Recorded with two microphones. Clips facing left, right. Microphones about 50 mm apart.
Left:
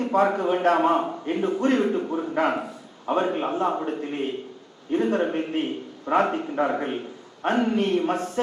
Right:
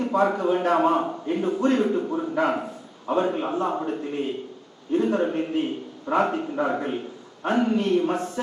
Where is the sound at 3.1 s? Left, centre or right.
Left.